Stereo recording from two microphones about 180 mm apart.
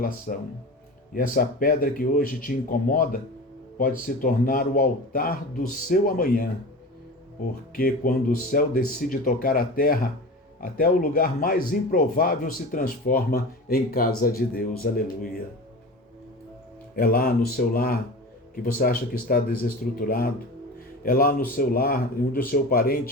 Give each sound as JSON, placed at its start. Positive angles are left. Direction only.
{"t": 0.3, "sound": "speech", "side_deg": 45}
{"t": 7.8, "sound": "speech", "side_deg": 55}
{"t": 16.9, "sound": "speech", "side_deg": 55}